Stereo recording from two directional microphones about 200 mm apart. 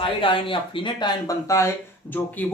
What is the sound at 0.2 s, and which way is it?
Speech, 25° left (ahead or behind).